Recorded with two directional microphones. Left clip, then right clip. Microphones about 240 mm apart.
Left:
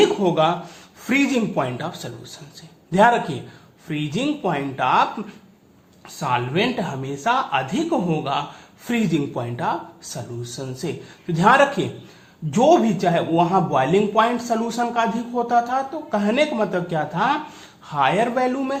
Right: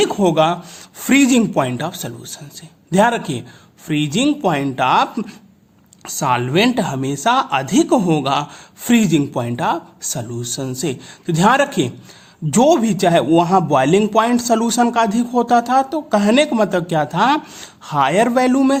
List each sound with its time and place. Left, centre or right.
0.0 s speech: right
6.1 s speech: right